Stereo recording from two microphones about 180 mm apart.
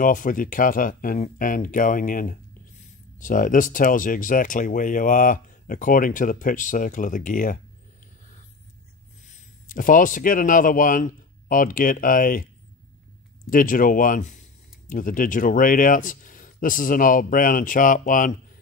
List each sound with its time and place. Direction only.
0.0 s speech: 50° left (ahead or behind)
9.3 s speech: 50° left (ahead or behind)
13.5 s speech: 50° left (ahead or behind)